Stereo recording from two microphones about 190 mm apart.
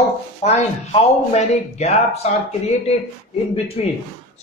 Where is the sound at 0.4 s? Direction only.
35° left (ahead or behind).